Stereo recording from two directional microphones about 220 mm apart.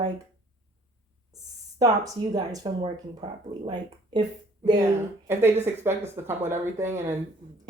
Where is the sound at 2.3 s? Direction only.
15° right (ahead or behind).